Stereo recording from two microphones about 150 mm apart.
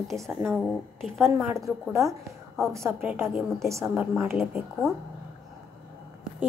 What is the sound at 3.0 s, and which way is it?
Speech, 15° right (ahead or behind).